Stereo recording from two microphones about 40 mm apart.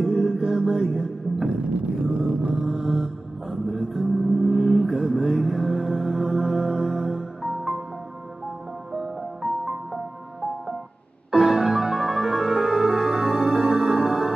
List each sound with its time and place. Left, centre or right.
0.0 s music: centre
1.6 s music: right
2.6 s music: centre
8.9 s music: centre
11.3 s music: centre